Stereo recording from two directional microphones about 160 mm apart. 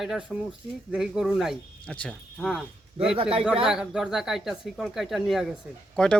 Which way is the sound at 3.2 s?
35° right (ahead or behind).